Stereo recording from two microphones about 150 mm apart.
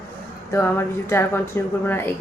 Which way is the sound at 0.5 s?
15° left (ahead or behind).